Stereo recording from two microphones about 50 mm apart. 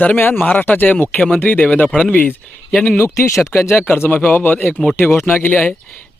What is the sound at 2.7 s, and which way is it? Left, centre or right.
Speech, centre.